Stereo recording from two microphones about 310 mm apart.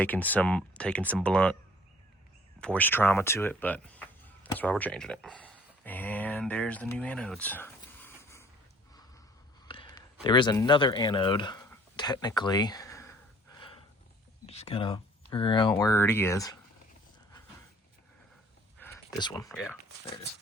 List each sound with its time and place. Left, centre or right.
0.0 s speech: centre
2.6 s speech: centre
9.6 s a sound: centre
10.2 s speech: centre
18.8 s a sound: centre
19.5 s speech: centre